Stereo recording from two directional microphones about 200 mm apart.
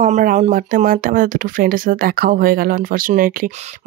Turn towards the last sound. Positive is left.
turn(degrees=-45)  # may be behind; listen again after turning